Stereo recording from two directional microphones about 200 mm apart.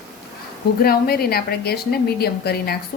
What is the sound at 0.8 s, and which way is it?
A woman's voice, 50° left (ahead or behind).